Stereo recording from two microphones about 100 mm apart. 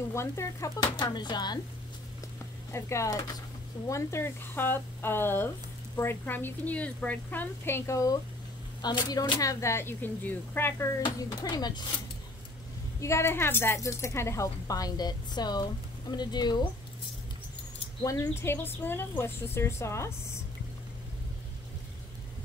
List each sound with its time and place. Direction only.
0.1 s a woman's voice: 30° left (ahead or behind)
0.9 s speech: 45° left (ahead or behind)
2.7 s a woman's voice: 30° left (ahead or behind)
8.8 s speech: 45° left (ahead or behind)
9.4 s a woman's voice: 30° left (ahead or behind)
11.1 s speech: 45° left (ahead or behind)
13.0 s speech: 30° left (ahead or behind); by 16.6 s 45° left (ahead or behind)
18.0 s a woman's voice: 30° left (ahead or behind)